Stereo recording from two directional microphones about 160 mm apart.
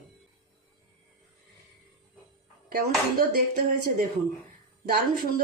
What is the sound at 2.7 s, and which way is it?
Speech, 70° right (ahead or behind).